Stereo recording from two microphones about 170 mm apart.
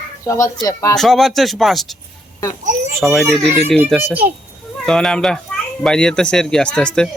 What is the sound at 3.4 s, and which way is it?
Speech, 35° right (ahead or behind).